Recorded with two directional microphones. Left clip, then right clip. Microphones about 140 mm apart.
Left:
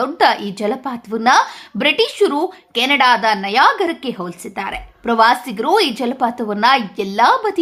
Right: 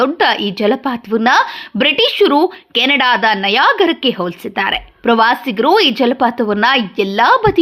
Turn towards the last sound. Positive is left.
turn(degrees=-30)  # may be behind; listen again after turning